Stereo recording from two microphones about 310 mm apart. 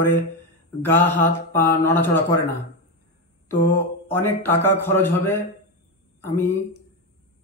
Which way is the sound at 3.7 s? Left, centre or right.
Centre.